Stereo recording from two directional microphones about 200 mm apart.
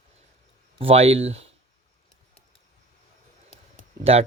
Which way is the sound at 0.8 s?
30° right (ahead or behind).